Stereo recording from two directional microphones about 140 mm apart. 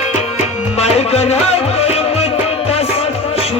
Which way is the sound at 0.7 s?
50° left (ahead or behind).